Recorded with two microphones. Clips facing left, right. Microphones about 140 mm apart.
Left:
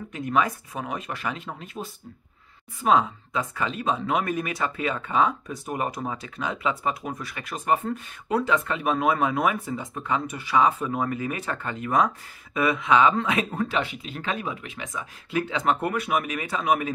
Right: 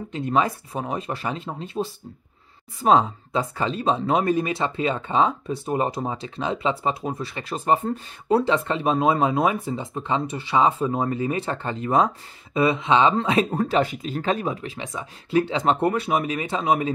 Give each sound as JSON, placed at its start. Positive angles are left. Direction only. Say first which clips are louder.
{"t": 0.1, "sound": "speech", "louder": "right 2 dB", "side_deg": -30}